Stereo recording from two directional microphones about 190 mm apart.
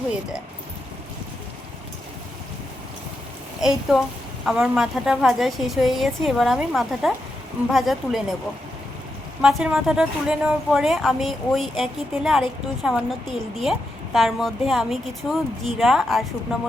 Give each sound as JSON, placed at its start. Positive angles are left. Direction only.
{"t": 3.6, "sound": "a woman's voice", "side_deg": 0}
{"t": 9.4, "sound": "a woman's voice", "side_deg": -5}